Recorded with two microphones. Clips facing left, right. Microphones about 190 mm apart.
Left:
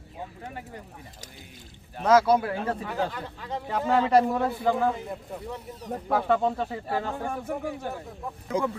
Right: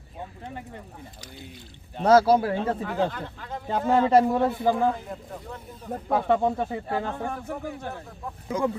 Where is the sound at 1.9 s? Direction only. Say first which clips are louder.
Right 2 dB; 30° right (ahead or behind).